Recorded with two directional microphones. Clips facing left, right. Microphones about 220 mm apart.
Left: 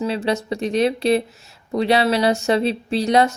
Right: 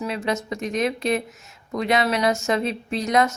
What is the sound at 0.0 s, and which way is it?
A woman's voice, 30° left (ahead or behind).